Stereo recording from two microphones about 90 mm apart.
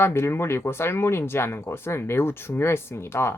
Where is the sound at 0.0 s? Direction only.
30° left (ahead or behind).